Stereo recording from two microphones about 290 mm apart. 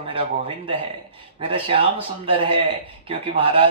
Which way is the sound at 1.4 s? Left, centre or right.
Centre.